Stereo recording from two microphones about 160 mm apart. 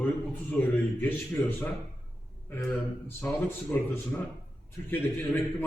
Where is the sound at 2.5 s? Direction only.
15° left (ahead or behind).